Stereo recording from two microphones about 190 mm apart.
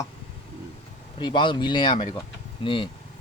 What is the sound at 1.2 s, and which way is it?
Speech, 25° left (ahead or behind).